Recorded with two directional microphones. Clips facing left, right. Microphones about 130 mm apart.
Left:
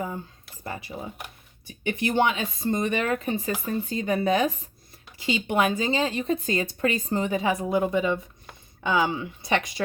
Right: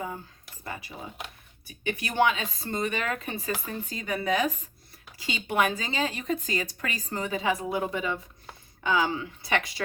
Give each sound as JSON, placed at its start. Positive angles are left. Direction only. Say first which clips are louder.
{"t": 0.6, "sound": "speech", "louder": "left 4 dB", "side_deg": 30}
{"t": 3.0, "sound": "speech", "louder": "left 6 dB", "side_deg": 30}